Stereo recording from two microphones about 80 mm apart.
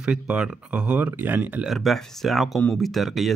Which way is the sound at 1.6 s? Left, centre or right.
Centre.